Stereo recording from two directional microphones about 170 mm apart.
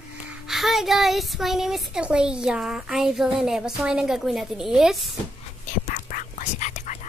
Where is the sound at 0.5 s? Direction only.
Centre (ahead or behind).